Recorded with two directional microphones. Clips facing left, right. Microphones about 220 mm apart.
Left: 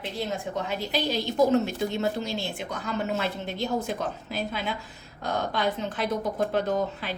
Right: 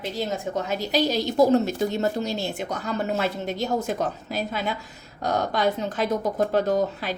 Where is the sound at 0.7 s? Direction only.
40° right (ahead or behind).